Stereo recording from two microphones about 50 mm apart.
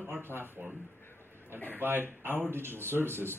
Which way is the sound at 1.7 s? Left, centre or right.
Right.